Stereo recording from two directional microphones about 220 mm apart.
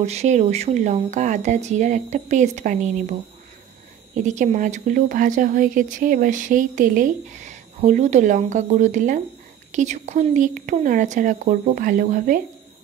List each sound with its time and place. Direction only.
0.0 s speech: 30° right (ahead or behind)